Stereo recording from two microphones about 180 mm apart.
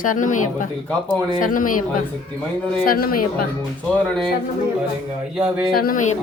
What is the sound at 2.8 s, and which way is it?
Speech, 55° left (ahead or behind).